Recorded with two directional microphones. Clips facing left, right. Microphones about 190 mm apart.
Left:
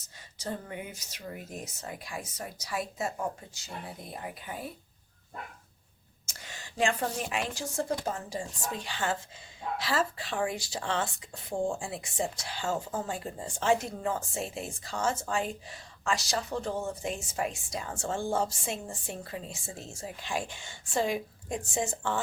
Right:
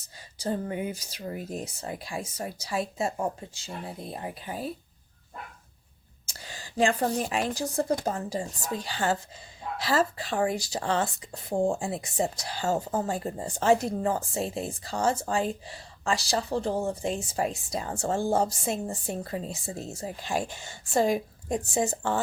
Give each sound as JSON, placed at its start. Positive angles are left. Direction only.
{"t": 0.3, "sound": "speech", "side_deg": -35}
{"t": 6.2, "sound": "a woman's voice", "side_deg": -35}